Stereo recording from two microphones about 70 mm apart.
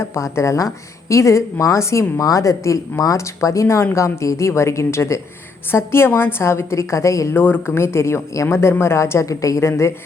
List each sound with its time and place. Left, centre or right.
0.0 s a woman's voice: left
7.3 s speech: left
7.8 s a woman's voice: left